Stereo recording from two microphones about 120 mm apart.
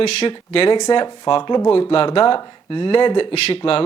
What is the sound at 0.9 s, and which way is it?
Speech, 40° left (ahead or behind).